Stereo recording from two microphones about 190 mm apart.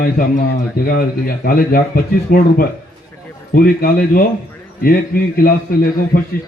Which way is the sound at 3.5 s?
55° left (ahead or behind).